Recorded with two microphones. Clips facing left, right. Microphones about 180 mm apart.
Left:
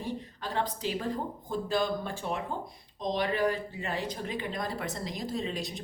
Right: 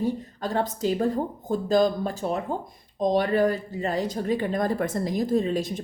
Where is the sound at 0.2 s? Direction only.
45° right (ahead or behind).